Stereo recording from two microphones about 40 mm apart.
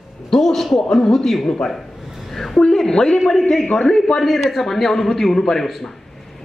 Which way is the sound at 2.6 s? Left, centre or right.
Centre.